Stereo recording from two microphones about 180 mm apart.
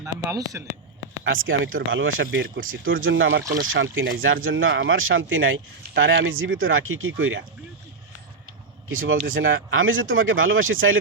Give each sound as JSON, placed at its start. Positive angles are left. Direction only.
{"t": 0.0, "sound": "speech", "side_deg": -20}
{"t": 1.2, "sound": "speech", "side_deg": -90}
{"t": 3.5, "sound": "speech", "side_deg": -80}
{"t": 8.9, "sound": "speech", "side_deg": -90}